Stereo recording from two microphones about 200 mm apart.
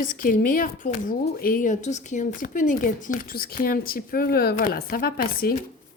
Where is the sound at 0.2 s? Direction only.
45° left (ahead or behind).